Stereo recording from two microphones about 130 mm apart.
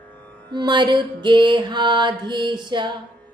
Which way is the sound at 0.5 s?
35° right (ahead or behind).